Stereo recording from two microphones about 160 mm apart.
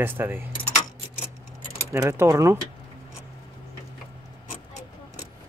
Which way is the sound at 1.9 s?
15° right (ahead or behind).